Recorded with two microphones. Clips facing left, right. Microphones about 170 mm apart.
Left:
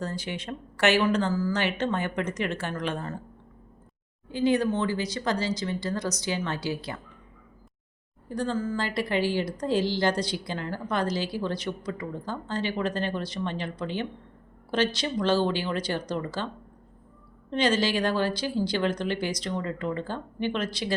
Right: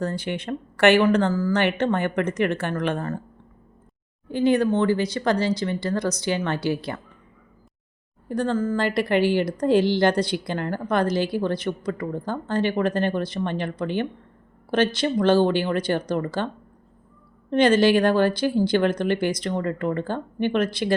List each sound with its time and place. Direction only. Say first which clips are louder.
0.0 s a woman's voice: right 6 dB; 60° right (ahead or behind)
4.3 s a woman's voice: right 4 dB; 60° right (ahead or behind)
8.3 s a woman's voice: right 5 dB; 60° right (ahead or behind)
17.5 s a woman's voice: right 8 dB; 55° right (ahead or behind)